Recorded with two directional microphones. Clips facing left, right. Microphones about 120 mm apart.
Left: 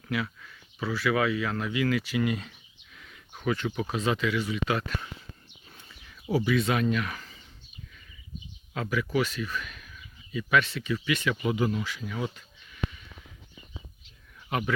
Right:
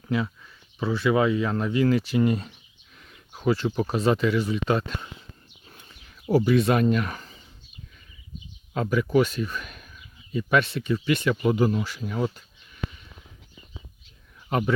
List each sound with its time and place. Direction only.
0.8 s speech: 25° right (ahead or behind)
6.3 s speech: 40° right (ahead or behind)
8.7 s speech: 40° right (ahead or behind)